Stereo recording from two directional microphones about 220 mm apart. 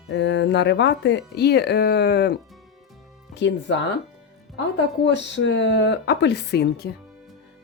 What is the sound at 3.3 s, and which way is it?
Speech, 55° left (ahead or behind).